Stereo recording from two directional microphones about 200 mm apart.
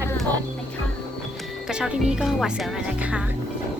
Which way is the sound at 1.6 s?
5° right (ahead or behind).